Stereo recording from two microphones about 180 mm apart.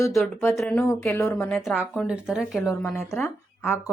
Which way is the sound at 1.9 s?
5° right (ahead or behind).